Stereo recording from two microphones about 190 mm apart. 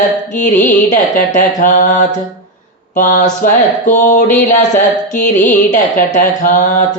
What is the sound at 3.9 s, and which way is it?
Mantra, 40° left (ahead or behind).